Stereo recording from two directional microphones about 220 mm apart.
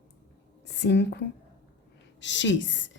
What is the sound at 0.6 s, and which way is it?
A woman's voice, 50° left (ahead or behind).